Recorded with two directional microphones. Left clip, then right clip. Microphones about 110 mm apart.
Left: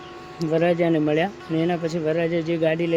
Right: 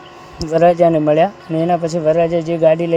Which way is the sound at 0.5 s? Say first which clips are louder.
Right 9 dB; 45° right (ahead or behind).